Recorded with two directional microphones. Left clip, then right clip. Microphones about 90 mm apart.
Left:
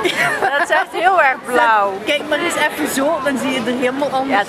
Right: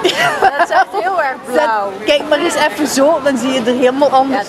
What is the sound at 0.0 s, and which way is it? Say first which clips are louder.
Chatter: right 4 dB; 20° right (ahead or behind).